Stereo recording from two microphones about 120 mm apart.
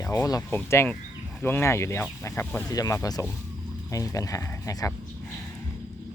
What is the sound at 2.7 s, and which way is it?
Speech, 30° left (ahead or behind).